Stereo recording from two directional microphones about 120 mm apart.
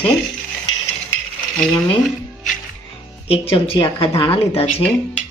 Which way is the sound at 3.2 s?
55° left (ahead or behind).